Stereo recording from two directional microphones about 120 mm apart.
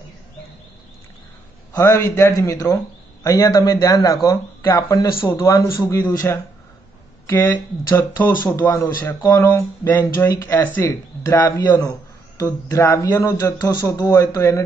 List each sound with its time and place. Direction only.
1.8 s speech: 30° left (ahead or behind)
9.2 s speech: 30° left (ahead or behind)
9.5 s speech: 15° left (ahead or behind)
11.4 s speech: 30° left (ahead or behind)
14.0 s speech: 20° left (ahead or behind)